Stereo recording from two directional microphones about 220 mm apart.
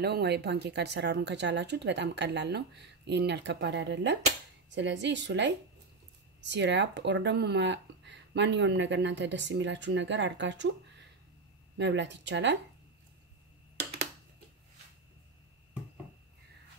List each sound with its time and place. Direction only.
0.0 s speech: 50° right (ahead or behind)
11.8 s speech: 55° right (ahead or behind)